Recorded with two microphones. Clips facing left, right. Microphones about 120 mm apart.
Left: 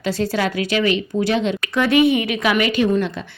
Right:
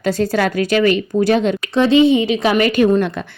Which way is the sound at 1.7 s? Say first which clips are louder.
Right 4 dB; 25° right (ahead or behind).